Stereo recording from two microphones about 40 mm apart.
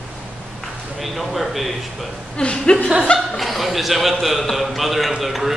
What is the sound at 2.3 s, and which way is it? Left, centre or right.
Speech, left.